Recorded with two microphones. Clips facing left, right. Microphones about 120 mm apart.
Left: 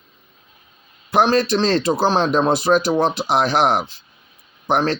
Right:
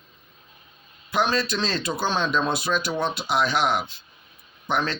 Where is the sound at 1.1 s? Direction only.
45° left (ahead or behind).